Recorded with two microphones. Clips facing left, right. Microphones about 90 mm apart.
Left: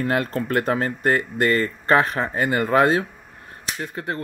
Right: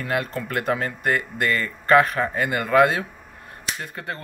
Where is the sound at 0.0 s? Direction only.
40° left (ahead or behind).